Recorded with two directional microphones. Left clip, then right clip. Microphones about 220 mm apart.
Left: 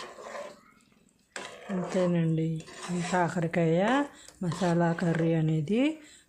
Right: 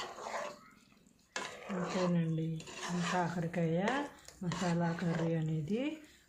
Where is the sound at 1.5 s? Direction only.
Centre (ahead or behind).